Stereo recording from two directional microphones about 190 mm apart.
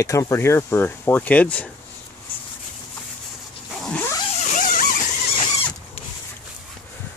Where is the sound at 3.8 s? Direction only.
5° left (ahead or behind).